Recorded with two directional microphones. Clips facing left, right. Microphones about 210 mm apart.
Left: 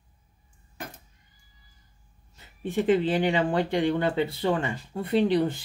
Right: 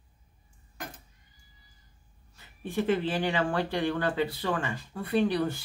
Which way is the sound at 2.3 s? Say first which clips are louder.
Left 3 dB; 20° left (ahead or behind).